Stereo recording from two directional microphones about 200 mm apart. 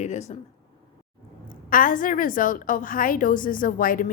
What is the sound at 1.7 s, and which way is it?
A woman's voice, 45° left (ahead or behind).